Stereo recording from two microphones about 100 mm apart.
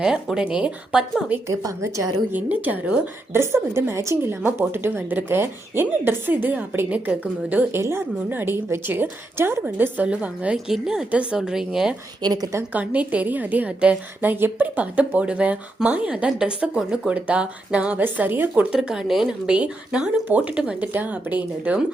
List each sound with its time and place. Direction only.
0.0 s a woman's voice: 5° right (ahead or behind)
1.5 s a woman's voice: 30° right (ahead or behind)
2.3 s a woman's voice: 15° right (ahead or behind)
12.2 s a woman's voice: 45° right (ahead or behind)
12.7 s a woman's voice: 15° right (ahead or behind)
18.8 s a woman's voice: 5° right (ahead or behind)